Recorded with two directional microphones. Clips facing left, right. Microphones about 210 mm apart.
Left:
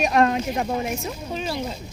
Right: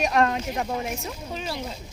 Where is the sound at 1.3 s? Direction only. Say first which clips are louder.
Left 4 dB; 25° left (ahead or behind).